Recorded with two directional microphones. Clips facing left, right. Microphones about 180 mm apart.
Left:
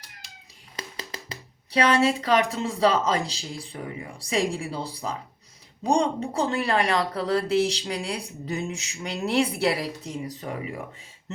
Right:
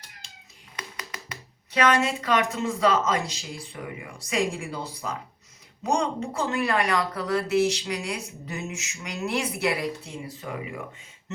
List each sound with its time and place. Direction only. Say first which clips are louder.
0.8 s speech: left 2 dB; 30° left (ahead or behind)